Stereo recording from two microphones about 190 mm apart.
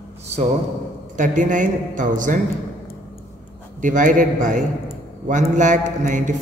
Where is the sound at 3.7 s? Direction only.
40° right (ahead or behind).